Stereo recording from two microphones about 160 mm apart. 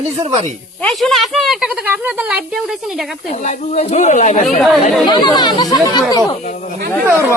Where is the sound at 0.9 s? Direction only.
Centre (ahead or behind).